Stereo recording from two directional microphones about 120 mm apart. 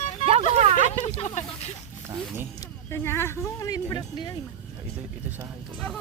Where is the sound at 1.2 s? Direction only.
65° left (ahead or behind).